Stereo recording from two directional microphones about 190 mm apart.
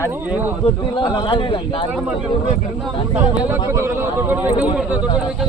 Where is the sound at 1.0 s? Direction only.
25° left (ahead or behind).